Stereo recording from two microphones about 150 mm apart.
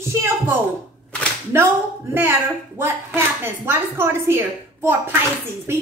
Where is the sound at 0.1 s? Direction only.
15° right (ahead or behind).